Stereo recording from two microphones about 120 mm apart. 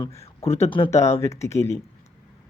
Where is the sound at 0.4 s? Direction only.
60° left (ahead or behind).